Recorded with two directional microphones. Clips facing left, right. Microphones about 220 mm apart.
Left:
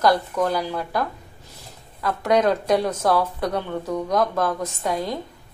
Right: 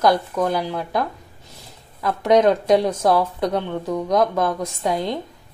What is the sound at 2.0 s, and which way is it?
Speech, 20° right (ahead or behind).